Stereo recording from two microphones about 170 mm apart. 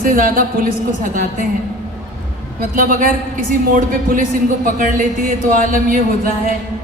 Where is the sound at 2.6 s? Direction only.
55° right (ahead or behind).